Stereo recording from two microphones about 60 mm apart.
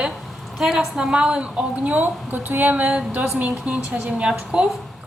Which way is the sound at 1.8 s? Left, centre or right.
Right.